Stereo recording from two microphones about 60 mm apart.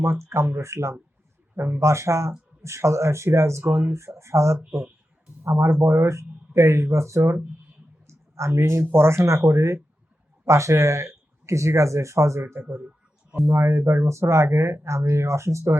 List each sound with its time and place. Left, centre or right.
0.0 s speech: right
1.5 s speech: right
8.0 s a sound: right
8.9 s speech: right